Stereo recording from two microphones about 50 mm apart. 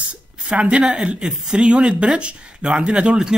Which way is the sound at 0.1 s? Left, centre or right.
Right.